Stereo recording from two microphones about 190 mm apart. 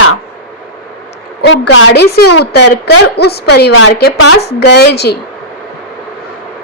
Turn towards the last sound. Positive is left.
turn(degrees=60)  # may be behind; listen again after turning